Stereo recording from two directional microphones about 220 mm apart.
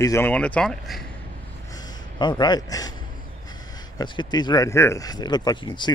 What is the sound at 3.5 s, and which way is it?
Speech, 20° left (ahead or behind).